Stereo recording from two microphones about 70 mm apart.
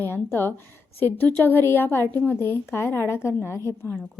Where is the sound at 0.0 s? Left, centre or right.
Left.